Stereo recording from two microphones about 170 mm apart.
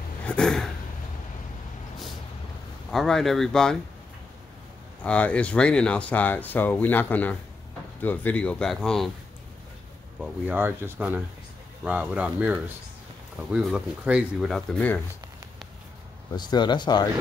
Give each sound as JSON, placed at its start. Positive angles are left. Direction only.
{"t": 0.2, "sound": "a sound", "side_deg": 5}
{"t": 2.9, "sound": "speech", "side_deg": 0}
{"t": 5.0, "sound": "speech", "side_deg": 5}
{"t": 10.2, "sound": "speech", "side_deg": -10}
{"t": 16.3, "sound": "speech", "side_deg": 25}